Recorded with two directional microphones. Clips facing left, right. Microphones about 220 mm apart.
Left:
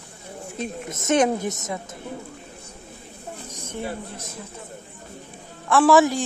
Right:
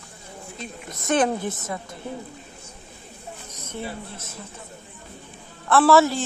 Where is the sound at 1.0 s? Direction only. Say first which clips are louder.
Left 2 dB; 20° left (ahead or behind).